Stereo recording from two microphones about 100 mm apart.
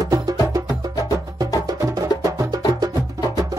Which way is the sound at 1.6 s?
35° right (ahead or behind).